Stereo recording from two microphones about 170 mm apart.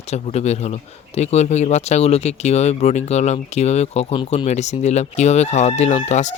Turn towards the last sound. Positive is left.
turn(degrees=40)  # may be behind; listen again after turning